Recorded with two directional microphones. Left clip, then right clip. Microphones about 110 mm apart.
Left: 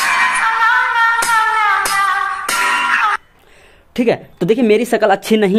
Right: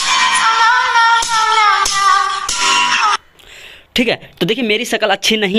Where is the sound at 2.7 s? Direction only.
15° right (ahead or behind).